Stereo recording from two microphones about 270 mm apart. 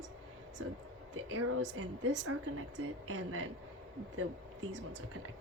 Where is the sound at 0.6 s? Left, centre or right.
Right.